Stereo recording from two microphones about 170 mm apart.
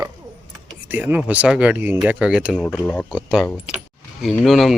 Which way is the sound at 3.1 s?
5° right (ahead or behind).